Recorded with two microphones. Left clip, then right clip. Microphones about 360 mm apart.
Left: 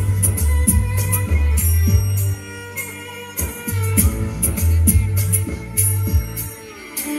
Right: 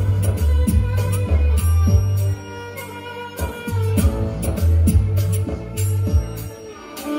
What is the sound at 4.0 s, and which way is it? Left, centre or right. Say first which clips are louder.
Music: left 1 dB; right.